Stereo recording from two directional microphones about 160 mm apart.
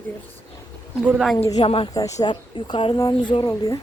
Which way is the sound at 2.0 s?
20° left (ahead or behind).